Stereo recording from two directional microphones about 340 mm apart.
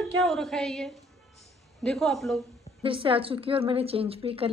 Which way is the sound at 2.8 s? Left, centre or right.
Centre.